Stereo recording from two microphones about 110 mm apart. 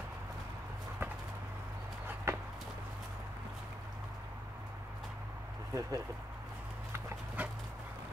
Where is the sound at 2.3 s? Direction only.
25° right (ahead or behind).